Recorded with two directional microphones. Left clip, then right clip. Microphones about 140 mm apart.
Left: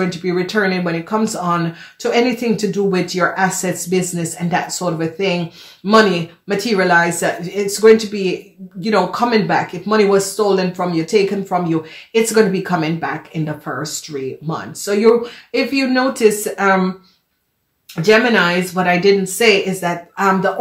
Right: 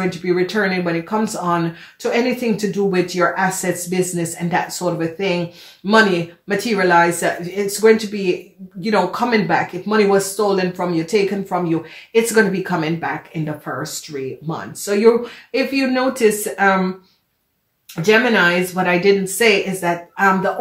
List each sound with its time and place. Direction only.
0.2 s speech: 35° left (ahead or behind)
18.0 s speech: 35° left (ahead or behind)